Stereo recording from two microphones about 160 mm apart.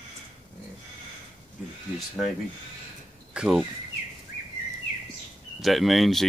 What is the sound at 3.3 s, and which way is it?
Speech, 5° right (ahead or behind).